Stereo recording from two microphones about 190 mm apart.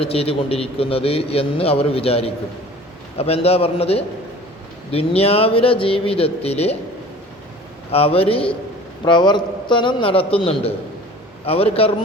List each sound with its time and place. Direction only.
0.0 s a man's voice: 30° left (ahead or behind)
7.9 s a man's voice: 30° left (ahead or behind)